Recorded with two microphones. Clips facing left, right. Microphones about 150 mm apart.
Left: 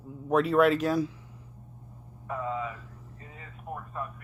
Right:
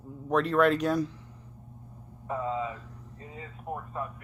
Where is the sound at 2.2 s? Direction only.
25° right (ahead or behind).